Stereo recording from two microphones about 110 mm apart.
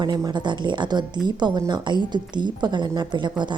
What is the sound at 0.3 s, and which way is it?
Speech, 45° right (ahead or behind).